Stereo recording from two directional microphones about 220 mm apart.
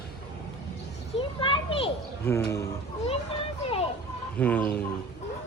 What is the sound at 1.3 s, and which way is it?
Children playing, 25° left (ahead or behind).